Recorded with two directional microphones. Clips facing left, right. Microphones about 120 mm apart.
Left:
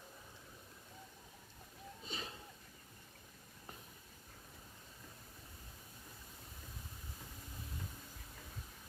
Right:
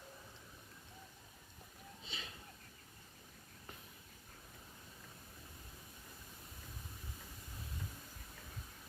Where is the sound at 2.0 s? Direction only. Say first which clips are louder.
Left 5 dB; 40° left (ahead or behind).